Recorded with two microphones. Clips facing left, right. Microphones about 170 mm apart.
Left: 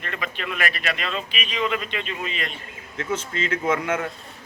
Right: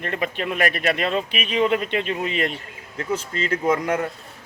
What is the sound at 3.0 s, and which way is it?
Speech, 35° right (ahead or behind).